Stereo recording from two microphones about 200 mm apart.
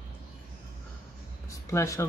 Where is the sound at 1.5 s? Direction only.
15° left (ahead or behind).